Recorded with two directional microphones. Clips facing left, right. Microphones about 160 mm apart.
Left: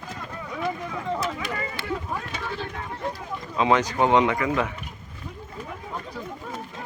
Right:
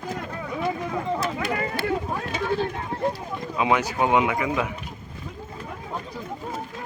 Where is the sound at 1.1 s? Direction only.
10° right (ahead or behind).